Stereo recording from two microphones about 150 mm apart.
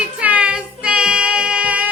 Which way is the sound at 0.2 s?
10° right (ahead or behind).